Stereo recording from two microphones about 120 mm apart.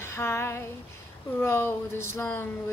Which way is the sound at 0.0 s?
20° left (ahead or behind).